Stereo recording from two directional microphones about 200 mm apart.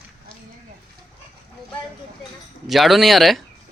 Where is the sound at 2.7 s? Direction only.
Centre (ahead or behind).